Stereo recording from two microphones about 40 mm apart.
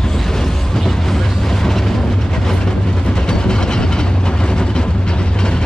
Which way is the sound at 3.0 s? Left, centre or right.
Centre.